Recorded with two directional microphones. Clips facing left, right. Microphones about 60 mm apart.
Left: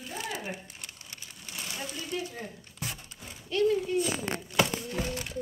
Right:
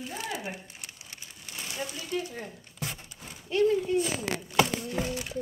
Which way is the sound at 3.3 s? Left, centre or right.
Right.